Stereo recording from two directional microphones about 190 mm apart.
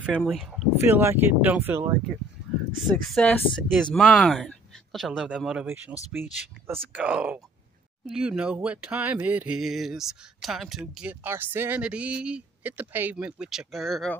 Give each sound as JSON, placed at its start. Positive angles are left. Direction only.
{"t": 0.0, "sound": "speech", "side_deg": -5}
{"t": 0.8, "sound": "speech", "side_deg": -10}
{"t": 2.5, "sound": "a sound", "side_deg": 0}
{"t": 3.1, "sound": "speech", "side_deg": 5}